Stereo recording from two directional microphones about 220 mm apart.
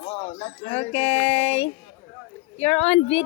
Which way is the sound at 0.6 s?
25° left (ahead or behind).